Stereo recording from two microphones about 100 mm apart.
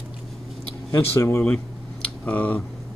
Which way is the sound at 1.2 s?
25° left (ahead or behind).